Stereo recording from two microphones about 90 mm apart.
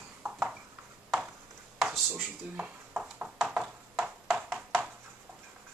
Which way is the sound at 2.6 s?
15° right (ahead or behind).